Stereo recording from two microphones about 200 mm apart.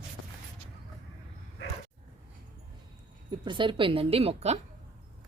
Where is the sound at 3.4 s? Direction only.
25° right (ahead or behind).